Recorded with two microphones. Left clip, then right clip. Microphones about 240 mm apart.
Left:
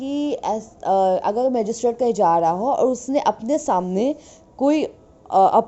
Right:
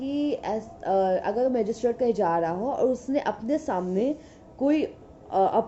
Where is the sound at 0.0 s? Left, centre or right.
Left.